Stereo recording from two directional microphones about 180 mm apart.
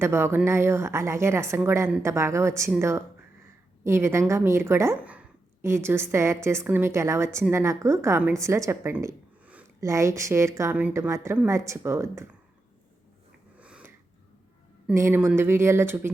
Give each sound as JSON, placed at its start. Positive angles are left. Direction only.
{"t": 0.0, "sound": "a woman's voice", "side_deg": -15}
{"t": 13.6, "sound": "a sound", "side_deg": -5}
{"t": 14.9, "sound": "a woman's voice", "side_deg": -15}